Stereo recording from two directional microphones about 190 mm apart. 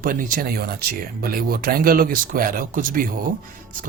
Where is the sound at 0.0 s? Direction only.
45° right (ahead or behind).